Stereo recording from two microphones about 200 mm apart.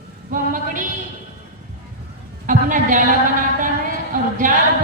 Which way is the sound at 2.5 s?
40° right (ahead or behind).